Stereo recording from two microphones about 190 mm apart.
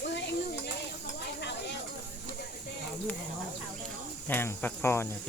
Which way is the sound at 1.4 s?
65° left (ahead or behind).